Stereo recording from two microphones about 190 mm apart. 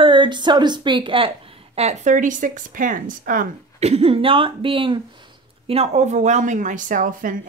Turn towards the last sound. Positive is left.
turn(degrees=-45)  # may be behind; listen again after turning